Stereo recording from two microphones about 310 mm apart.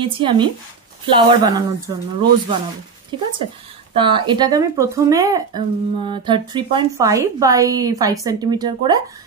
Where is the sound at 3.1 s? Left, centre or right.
Centre.